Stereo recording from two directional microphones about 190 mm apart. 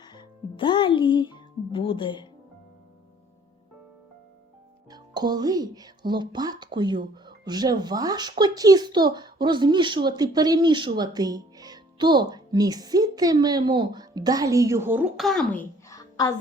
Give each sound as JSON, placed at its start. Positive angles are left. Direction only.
{"t": 0.0, "sound": "music", "side_deg": 20}
{"t": 4.9, "sound": "speech", "side_deg": -20}
{"t": 15.9, "sound": "music", "side_deg": 20}